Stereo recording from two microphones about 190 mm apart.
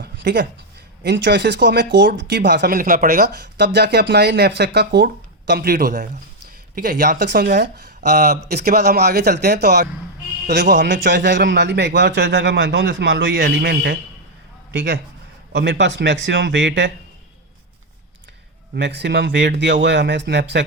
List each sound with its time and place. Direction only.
0.0 s a sound: 65° right (ahead or behind)
1.0 s speech: 65° right (ahead or behind)
6.7 s speech: 45° right (ahead or behind)
8.4 s a man's voice: 55° right (ahead or behind)
18.8 s speech: 65° right (ahead or behind)